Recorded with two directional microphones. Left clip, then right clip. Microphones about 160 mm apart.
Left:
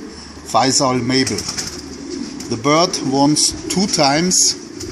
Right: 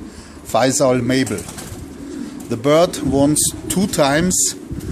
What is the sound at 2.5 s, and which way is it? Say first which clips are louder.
Speech: right 1 dB; 35° right (ahead or behind).